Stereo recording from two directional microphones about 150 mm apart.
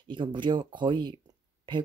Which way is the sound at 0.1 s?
30° right (ahead or behind).